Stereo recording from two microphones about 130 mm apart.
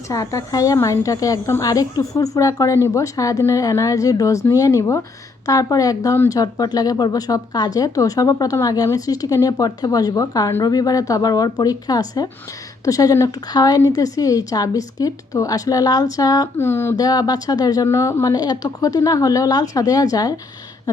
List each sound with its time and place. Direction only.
0.1 s a woman's voice: 25° left (ahead or behind)
16.6 s a woman's voice: 20° left (ahead or behind)
17.0 s a woman's voice: 30° left (ahead or behind)